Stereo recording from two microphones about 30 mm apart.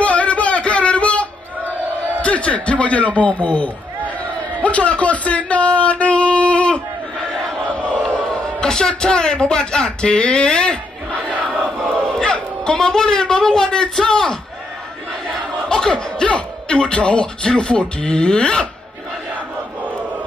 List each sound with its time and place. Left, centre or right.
0.0 s a sound: left
2.2 s a man's voice: left
8.3 s a man's voice: left
10.0 s speech: left
11.1 s crowd: left
11.6 s a sound: left
15.7 s music: left
16.3 s speech: left